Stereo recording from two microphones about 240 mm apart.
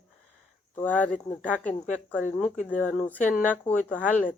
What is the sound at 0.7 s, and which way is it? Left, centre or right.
Speech, centre.